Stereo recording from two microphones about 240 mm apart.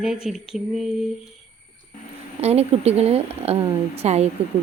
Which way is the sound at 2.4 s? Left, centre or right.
Right.